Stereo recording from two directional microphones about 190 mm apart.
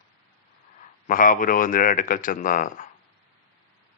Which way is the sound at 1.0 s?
45° left (ahead or behind).